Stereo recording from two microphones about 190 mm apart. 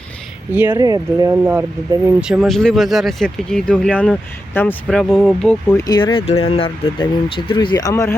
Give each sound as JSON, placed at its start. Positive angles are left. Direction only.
{"t": 0.5, "sound": "speech", "side_deg": -10}
{"t": 2.2, "sound": "speech", "side_deg": 0}
{"t": 5.7, "sound": "speech", "side_deg": 20}